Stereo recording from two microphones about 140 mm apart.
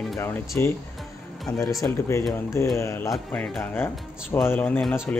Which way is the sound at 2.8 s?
20° left (ahead or behind).